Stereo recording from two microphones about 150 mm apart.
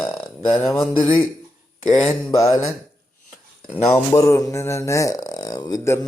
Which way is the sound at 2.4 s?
20° left (ahead or behind).